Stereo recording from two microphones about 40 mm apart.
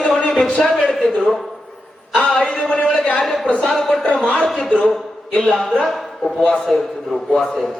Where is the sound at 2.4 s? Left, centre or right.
Left.